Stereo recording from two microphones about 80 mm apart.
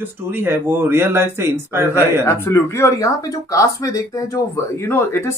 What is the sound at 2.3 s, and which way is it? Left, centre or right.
Speech, left.